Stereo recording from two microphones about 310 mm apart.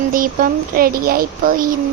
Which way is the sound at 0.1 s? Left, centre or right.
Right.